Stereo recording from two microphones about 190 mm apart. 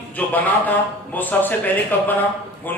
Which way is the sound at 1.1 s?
10° left (ahead or behind).